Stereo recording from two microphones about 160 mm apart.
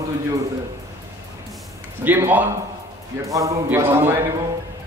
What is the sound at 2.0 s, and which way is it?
A man's voice, 10° right (ahead or behind).